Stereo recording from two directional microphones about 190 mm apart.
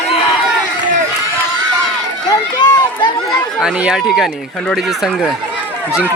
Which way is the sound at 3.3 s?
5° right (ahead or behind).